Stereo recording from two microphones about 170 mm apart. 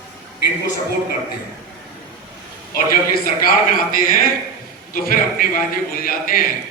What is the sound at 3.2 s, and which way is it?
A man's voice, 55° left (ahead or behind).